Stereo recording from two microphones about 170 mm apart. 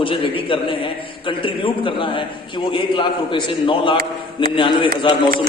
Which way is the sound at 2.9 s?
30° left (ahead or behind).